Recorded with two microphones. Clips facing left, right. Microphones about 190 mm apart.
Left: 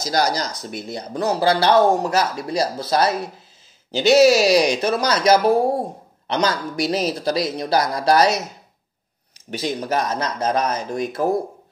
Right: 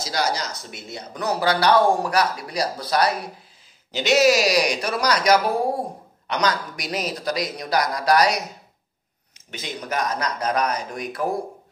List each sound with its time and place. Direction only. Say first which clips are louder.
0.0 s speech: left 4 dB; 40° left (ahead or behind)
9.5 s speech: left 7 dB; 35° left (ahead or behind)